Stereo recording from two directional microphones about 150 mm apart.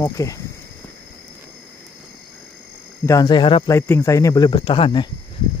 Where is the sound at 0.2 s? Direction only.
20° left (ahead or behind).